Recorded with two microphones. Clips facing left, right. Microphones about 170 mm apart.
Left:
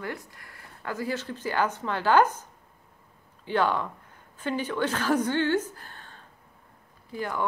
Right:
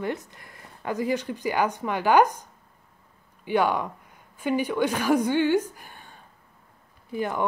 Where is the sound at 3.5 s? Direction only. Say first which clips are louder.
Right 2 dB; 15° right (ahead or behind).